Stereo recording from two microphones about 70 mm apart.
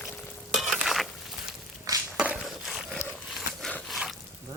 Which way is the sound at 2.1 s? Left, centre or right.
Centre.